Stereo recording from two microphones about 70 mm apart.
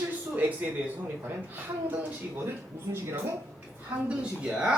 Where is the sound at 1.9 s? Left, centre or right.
Right.